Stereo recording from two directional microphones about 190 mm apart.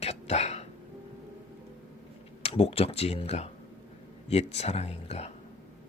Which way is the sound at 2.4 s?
30° left (ahead or behind).